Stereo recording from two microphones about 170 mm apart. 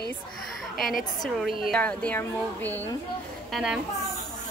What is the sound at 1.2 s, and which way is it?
A woman's voice, centre (ahead or behind).